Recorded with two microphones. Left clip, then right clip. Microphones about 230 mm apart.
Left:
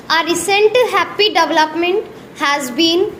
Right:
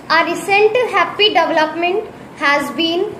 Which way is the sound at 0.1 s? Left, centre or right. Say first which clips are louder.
Right 1 dB; left.